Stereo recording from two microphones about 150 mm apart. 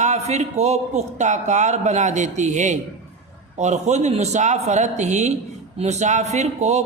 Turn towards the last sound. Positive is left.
turn(degrees=-50)  # may be behind; listen again after turning